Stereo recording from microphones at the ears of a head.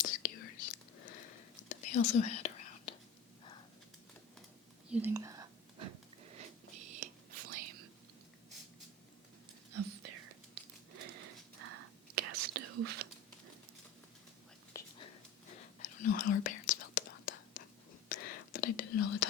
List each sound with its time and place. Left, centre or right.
0.0 s whispering: left
5.7 s whispering: right
9.7 s whispering: right
14.8 s whispering: left